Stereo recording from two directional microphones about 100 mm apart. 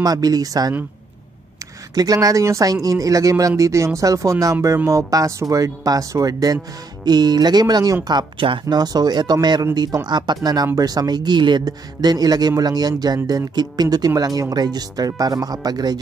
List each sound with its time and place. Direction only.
0.0 s speech: 40° right (ahead or behind)
2.0 s speech: 35° right (ahead or behind)